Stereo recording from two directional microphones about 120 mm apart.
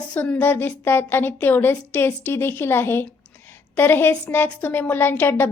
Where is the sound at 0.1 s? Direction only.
15° left (ahead or behind).